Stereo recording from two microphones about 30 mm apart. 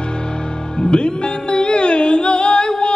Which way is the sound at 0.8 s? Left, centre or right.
Left.